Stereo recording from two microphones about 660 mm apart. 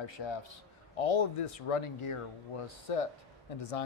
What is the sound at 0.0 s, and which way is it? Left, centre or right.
A man's voice, left.